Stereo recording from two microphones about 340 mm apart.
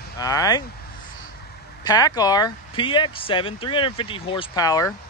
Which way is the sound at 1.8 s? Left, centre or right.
Centre.